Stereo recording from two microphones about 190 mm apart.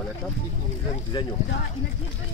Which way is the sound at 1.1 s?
25° left (ahead or behind).